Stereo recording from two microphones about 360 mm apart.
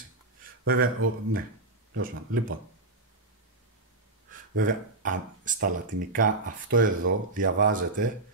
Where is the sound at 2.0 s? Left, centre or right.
Right.